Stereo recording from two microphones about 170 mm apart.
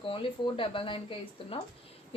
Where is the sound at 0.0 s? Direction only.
30° left (ahead or behind).